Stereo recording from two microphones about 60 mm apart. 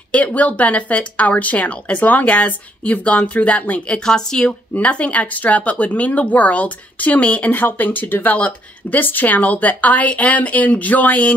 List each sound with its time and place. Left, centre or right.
0.1 s speech: left
4.7 s speech: left